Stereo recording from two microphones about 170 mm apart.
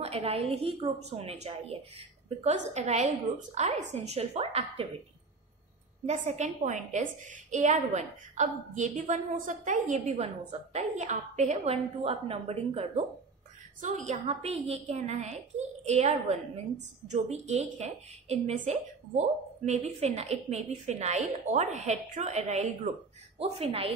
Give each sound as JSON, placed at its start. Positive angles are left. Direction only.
{"t": 0.0, "sound": "a woman's voice", "side_deg": -35}
{"t": 6.0, "sound": "a woman's voice", "side_deg": -40}